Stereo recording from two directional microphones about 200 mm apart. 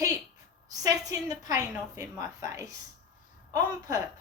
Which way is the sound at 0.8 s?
15° right (ahead or behind).